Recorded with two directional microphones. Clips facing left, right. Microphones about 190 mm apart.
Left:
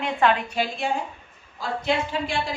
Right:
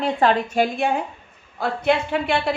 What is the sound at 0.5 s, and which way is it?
A woman's voice, 55° right (ahead or behind).